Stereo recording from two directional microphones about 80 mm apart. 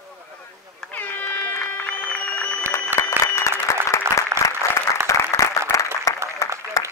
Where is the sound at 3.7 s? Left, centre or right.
Left.